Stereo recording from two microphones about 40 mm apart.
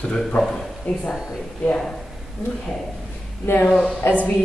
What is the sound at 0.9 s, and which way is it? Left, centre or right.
Speech, left.